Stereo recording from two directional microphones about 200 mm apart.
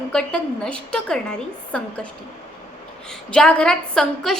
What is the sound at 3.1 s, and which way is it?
A woman's voice, 5° left (ahead or behind).